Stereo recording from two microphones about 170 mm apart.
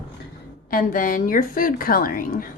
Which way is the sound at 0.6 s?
55° left (ahead or behind).